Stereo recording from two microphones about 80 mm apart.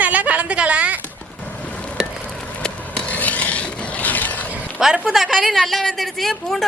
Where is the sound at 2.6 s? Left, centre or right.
Centre.